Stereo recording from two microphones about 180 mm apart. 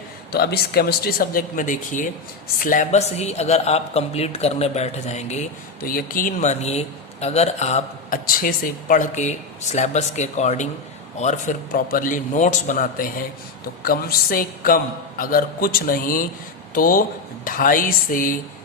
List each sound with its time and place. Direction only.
0.3 s a man's voice: 60° left (ahead or behind); by 5.5 s 40° left (ahead or behind)
5.8 s a man's voice: 55° left (ahead or behind)